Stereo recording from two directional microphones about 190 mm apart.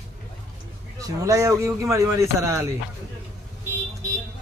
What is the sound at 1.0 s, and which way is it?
Speech, 15° right (ahead or behind).